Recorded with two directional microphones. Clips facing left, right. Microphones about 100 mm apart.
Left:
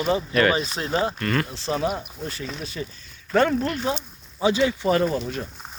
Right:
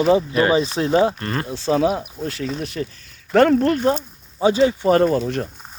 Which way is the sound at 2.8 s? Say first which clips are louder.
Right 6 dB; 55° right (ahead or behind).